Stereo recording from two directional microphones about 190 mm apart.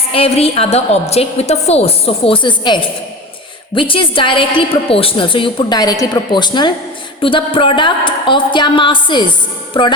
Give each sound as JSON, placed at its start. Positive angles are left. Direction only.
{"t": 0.1, "sound": "a woman's voice", "side_deg": 30}